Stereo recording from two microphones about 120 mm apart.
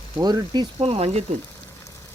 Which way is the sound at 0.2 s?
35° right (ahead or behind).